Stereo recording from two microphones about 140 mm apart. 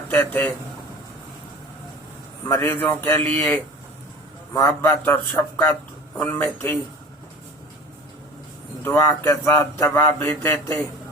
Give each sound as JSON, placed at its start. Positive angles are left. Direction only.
{"t": 0.1, "sound": "a man's voice", "side_deg": 10}
{"t": 2.4, "sound": "a man's voice", "side_deg": 20}
{"t": 4.8, "sound": "a man's voice", "side_deg": 15}
{"t": 8.8, "sound": "speech", "side_deg": 20}